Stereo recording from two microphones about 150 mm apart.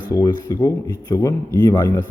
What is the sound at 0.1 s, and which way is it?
A man's voice, 20° left (ahead or behind).